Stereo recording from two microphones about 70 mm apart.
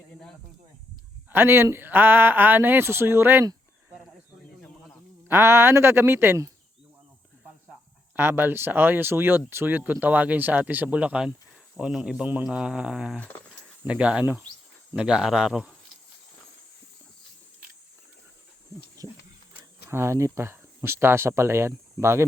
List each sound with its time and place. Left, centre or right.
1.3 s speech: right
5.3 s speech: right
8.1 s speech: right; by 12.2 s centre
12.2 s speech: right
13.4 s a sound: centre
13.8 s speech: centre
19.0 s a sound: right
19.9 s speech: right